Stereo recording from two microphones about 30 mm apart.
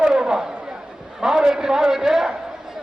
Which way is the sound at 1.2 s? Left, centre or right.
Right.